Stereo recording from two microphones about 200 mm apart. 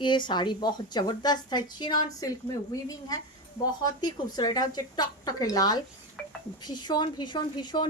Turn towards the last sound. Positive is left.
turn(degrees=20)  # may be behind; listen again after turning